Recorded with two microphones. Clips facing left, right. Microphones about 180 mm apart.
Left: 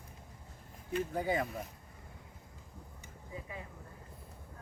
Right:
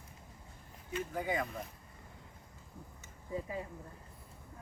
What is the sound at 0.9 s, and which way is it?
Speech, 30° left (ahead or behind).